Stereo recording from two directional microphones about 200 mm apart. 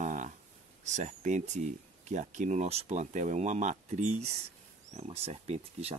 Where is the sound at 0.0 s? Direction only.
40° right (ahead or behind).